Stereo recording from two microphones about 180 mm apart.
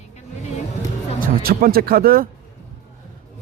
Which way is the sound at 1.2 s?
55° right (ahead or behind).